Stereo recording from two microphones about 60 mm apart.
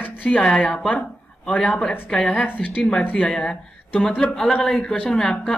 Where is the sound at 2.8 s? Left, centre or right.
Centre.